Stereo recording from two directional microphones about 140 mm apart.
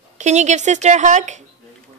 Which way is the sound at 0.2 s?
55° right (ahead or behind).